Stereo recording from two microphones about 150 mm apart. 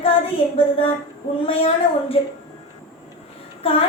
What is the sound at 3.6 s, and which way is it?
Speech, 40° left (ahead or behind).